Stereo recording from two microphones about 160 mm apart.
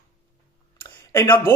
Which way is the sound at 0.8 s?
15° left (ahead or behind).